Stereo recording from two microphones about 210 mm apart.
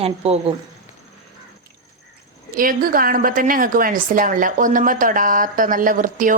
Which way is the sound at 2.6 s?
40° right (ahead or behind).